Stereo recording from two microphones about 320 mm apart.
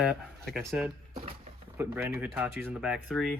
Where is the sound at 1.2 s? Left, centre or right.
Centre.